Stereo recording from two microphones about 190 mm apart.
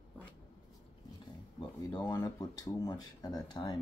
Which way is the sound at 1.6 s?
20° left (ahead or behind).